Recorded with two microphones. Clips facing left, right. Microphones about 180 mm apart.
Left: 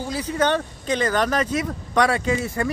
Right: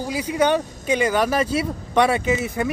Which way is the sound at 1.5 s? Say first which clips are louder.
Right 2 dB; 25° right (ahead or behind).